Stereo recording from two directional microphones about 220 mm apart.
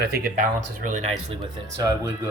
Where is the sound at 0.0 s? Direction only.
45° right (ahead or behind).